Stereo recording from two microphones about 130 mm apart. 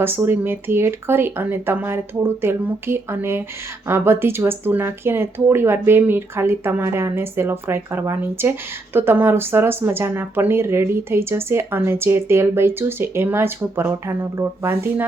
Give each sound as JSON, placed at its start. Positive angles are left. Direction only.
{"t": 0.0, "sound": "speech", "side_deg": -15}